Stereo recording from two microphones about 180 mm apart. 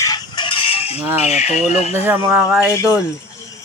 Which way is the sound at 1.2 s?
35° left (ahead or behind).